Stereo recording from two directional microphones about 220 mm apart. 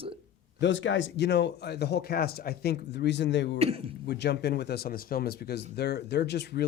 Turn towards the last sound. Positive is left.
turn(degrees=50)  # may be behind; listen again after turning